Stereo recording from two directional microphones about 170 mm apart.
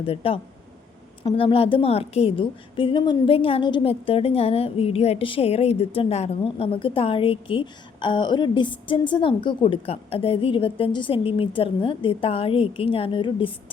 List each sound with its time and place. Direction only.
0.0 s a woman's voice: 35° left (ahead or behind)